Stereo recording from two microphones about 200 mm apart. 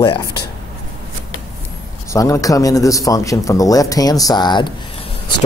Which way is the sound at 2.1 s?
15° left (ahead or behind).